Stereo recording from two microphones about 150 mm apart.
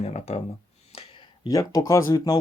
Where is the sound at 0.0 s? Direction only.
45° left (ahead or behind).